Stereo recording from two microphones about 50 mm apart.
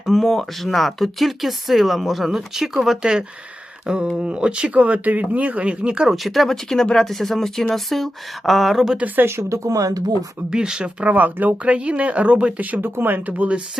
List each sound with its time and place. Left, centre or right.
0.0 s speech: centre
3.0 s speech: centre
6.2 s speech: centre
9.2 s speech: right
10.5 s speech: centre
11.0 s speech: right
12.8 s speech: right